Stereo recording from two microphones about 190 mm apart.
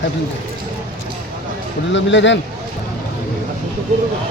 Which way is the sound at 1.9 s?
70° left (ahead or behind).